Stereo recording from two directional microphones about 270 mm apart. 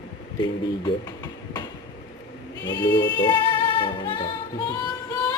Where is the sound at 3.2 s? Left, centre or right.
Centre.